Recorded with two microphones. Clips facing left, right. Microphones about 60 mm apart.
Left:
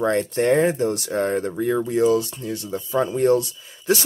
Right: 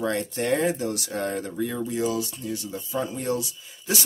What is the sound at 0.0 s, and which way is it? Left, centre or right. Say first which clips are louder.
Speech: left 6 dB; left.